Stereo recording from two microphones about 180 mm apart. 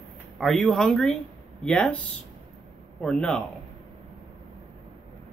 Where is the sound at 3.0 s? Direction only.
5° left (ahead or behind).